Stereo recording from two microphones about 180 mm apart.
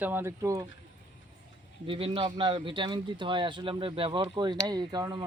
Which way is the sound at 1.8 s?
30° right (ahead or behind).